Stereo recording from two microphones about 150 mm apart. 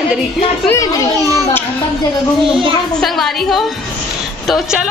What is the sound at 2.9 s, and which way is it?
Speech, centre (ahead or behind).